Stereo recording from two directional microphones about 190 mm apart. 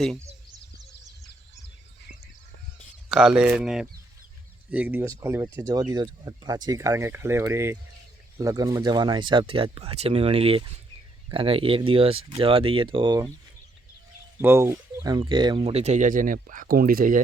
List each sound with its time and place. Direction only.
3.1 s speech: 5° right (ahead or behind); by 13.3 s 25° right (ahead or behind)
14.3 s speech: 10° right (ahead or behind); by 17.2 s 45° right (ahead or behind)